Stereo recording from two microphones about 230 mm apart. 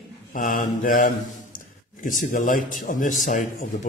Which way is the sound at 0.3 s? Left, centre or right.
Left.